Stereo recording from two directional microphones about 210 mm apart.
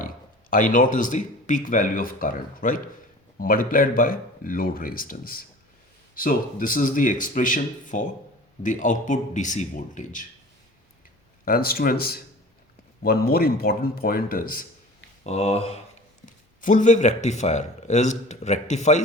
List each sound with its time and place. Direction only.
0.5 s a man's voice: 40° left (ahead or behind)
11.4 s speech: 45° left (ahead or behind)
15.2 s a man's voice: 30° left (ahead or behind)